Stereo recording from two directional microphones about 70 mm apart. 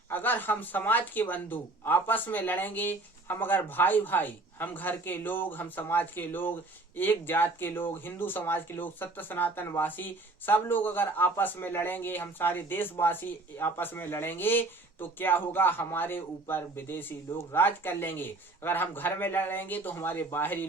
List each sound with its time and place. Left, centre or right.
0.1 s speech: left